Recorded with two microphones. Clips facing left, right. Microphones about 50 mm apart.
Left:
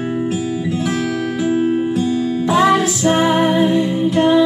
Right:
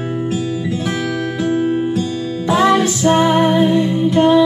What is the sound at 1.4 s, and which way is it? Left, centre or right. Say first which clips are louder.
Music: even; centre.